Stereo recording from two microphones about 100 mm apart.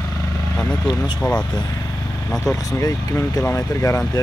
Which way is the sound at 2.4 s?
35° left (ahead or behind).